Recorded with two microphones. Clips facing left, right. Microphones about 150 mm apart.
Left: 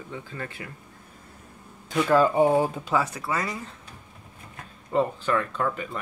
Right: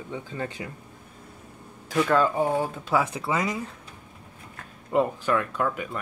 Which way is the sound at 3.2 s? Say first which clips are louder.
Right 3 dB; 20° right (ahead or behind).